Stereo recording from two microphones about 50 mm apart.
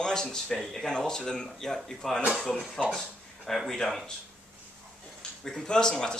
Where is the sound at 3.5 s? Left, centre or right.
Centre.